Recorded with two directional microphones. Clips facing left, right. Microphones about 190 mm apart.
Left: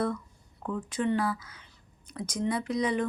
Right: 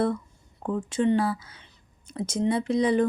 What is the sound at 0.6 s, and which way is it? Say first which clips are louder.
Speech: right 5 dB; 30° right (ahead or behind).